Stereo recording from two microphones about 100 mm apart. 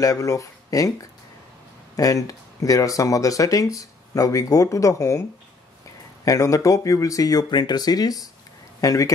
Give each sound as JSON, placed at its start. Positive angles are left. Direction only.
{"t": 0.0, "sound": "speech", "side_deg": 35}
{"t": 2.0, "sound": "speech", "side_deg": 35}
{"t": 6.2, "sound": "speech", "side_deg": 30}